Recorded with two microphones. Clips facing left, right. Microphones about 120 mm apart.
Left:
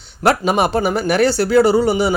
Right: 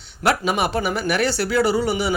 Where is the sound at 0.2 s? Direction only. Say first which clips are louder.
Left 5 dB; 40° left (ahead or behind).